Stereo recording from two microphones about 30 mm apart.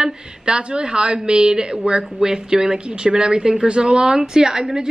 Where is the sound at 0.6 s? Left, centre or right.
Right.